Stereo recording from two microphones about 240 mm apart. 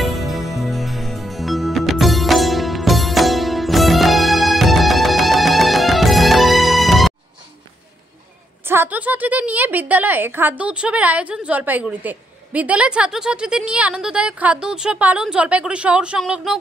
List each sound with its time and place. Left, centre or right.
0.0 s music: centre
8.6 s a woman's voice: centre